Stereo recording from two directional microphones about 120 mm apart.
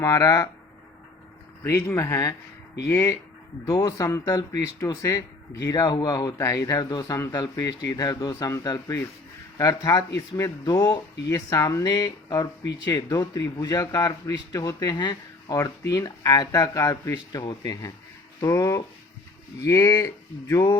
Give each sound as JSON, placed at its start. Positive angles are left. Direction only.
{"t": 0.0, "sound": "speech", "side_deg": 30}
{"t": 1.6, "sound": "speech", "side_deg": 25}